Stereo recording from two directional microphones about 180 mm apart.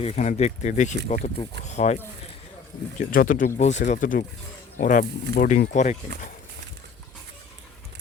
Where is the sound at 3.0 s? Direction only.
50° left (ahead or behind).